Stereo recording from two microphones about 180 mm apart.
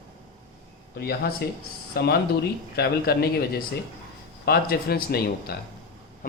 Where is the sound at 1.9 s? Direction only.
65° left (ahead or behind).